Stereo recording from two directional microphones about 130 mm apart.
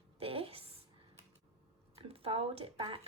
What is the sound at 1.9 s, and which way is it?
Speech, 50° right (ahead or behind).